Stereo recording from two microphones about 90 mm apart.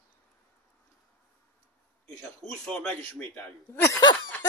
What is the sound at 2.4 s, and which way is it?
Speech, 10° left (ahead or behind).